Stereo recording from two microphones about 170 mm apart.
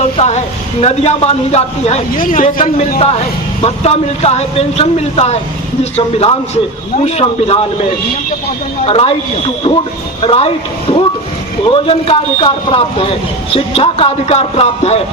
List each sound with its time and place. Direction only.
0.2 s speech: 40° left (ahead or behind)
8.9 s speech: 35° left (ahead or behind)
10.2 s speech: 35° left (ahead or behind)